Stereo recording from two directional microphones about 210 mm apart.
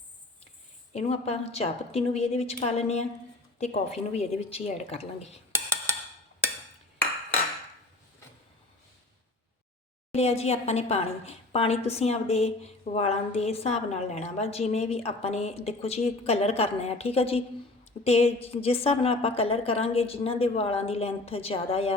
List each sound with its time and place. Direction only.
0.9 s a woman's voice: 30° left (ahead or behind)
5.5 s a sound: 10° right (ahead or behind)
10.2 s a woman's voice: 30° left (ahead or behind)